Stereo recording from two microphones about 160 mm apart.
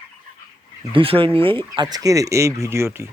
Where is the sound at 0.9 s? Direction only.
35° right (ahead or behind); by 3.1 s 15° right (ahead or behind).